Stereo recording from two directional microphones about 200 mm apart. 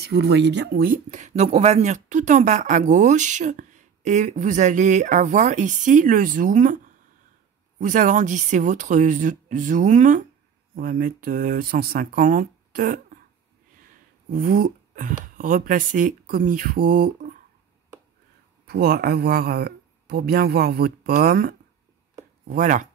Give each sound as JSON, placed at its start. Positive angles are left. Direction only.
{"t": 0.0, "sound": "speech", "side_deg": -55}
{"t": 0.8, "sound": "speech", "side_deg": -40}
{"t": 7.8, "sound": "speech", "side_deg": -40}
{"t": 14.3, "sound": "speech", "side_deg": -45}
{"t": 18.7, "sound": "speech", "side_deg": -50}